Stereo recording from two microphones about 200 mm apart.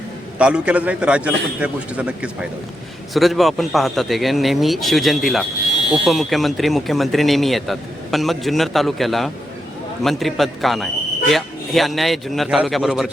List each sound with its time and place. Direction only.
0.3 s speech: 5° right (ahead or behind)